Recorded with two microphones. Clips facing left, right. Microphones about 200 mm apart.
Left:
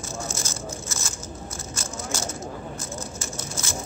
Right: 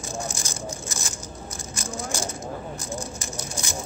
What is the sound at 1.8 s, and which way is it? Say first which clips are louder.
Vehicle: right 3 dB; 15° right (ahead or behind).